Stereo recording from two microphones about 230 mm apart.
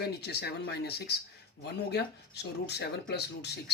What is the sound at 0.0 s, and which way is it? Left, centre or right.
Speech, left.